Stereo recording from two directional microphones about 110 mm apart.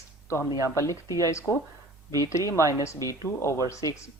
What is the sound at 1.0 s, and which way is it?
Speech, 30° right (ahead or behind).